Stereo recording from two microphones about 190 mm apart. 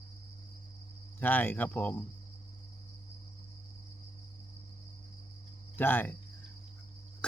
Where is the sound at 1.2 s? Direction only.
10° left (ahead or behind).